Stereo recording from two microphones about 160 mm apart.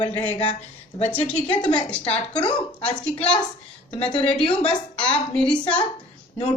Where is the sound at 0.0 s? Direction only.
35° left (ahead or behind).